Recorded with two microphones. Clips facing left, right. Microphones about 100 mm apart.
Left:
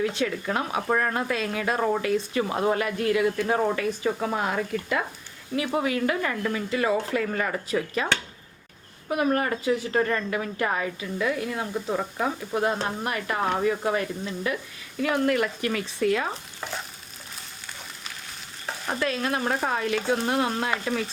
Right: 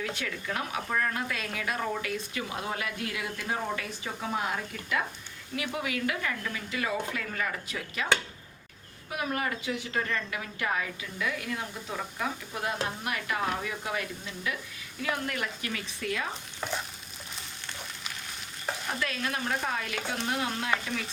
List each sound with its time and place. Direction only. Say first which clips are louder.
0.0 s speech: left 9 dB; 25° left (ahead or behind)
0.9 s a woman's voice: left 6 dB; 35° left (ahead or behind)
2.5 s speech: left 10 dB; 45° left (ahead or behind)
3.4 s speech: left 9 dB; 55° left (ahead or behind)
5.5 s a woman's voice: left 7 dB; 35° left (ahead or behind)
9.0 s a woman's voice: left 8 dB; 45° left (ahead or behind)
15.1 s speech: left 10 dB; 65° left (ahead or behind)
15.6 s a woman's voice: left 10 dB; 40° left (ahead or behind)
16.6 s stir: even; 5° left (ahead or behind)
18.9 s a woman's voice: left 8 dB; 35° left (ahead or behind)